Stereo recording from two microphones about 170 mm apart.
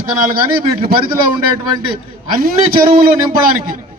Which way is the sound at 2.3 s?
60° right (ahead or behind).